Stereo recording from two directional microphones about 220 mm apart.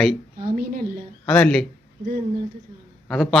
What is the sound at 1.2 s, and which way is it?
Speech, 5° left (ahead or behind).